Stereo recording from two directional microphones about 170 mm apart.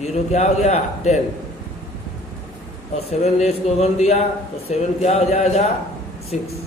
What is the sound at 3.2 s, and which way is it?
A man's voice, 40° left (ahead or behind).